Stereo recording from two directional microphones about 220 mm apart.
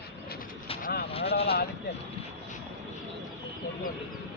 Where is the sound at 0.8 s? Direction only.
40° left (ahead or behind).